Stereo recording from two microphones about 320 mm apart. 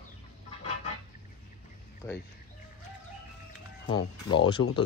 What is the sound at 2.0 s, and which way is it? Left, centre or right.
Speech, centre.